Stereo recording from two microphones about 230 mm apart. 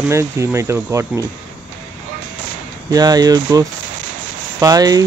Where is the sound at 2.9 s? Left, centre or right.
Centre.